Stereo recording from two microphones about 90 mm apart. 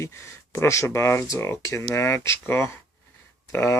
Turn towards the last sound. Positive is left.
turn(degrees=25)  # may be behind; listen again after turning